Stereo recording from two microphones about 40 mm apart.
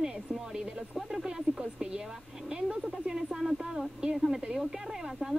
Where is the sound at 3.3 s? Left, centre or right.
Centre.